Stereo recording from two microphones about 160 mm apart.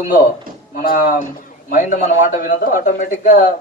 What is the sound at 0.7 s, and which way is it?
A man's voice, 60° left (ahead or behind).